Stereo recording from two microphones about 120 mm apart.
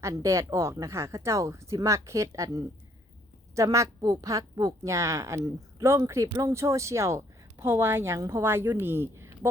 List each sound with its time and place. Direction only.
0.0 s speech: 25° right (ahead or behind)